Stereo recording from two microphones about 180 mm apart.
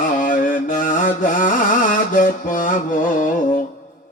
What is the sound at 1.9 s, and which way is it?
Music, 45° left (ahead or behind).